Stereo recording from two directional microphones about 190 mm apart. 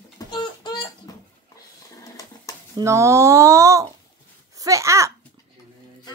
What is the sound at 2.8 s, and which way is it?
Speech, 15° right (ahead or behind).